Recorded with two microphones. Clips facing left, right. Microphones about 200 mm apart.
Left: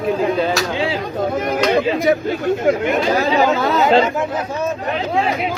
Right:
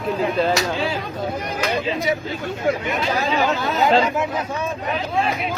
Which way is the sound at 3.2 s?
90° left.